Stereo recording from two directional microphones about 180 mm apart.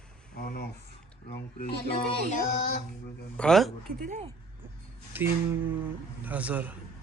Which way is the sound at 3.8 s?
50° right (ahead or behind).